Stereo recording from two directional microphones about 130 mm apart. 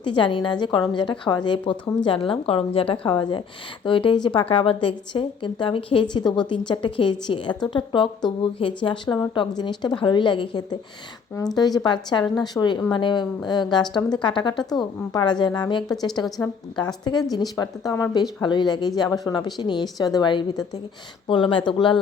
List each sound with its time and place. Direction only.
0.0 s speech: 40° left (ahead or behind)
1.7 s speech: 10° left (ahead or behind)
2.0 s a woman's voice: 40° left (ahead or behind)